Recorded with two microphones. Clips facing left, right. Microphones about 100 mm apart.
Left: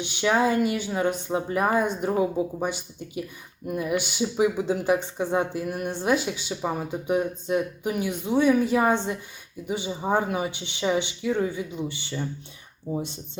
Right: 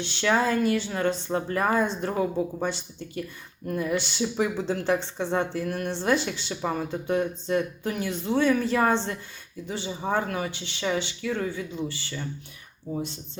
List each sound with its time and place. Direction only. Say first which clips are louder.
0.0 s speech: left 2 dB; 15° left (ahead or behind)